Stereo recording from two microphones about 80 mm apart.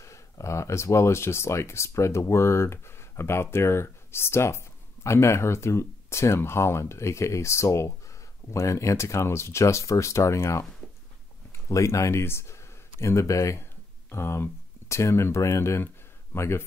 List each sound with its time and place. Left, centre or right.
0.0 s speech: left
11.7 s speech: left